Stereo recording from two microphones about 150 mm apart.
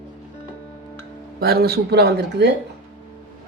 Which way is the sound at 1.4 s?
90° right.